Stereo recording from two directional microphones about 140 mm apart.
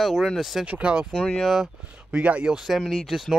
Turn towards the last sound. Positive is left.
turn(degrees=0)  # may be behind; listen again after turning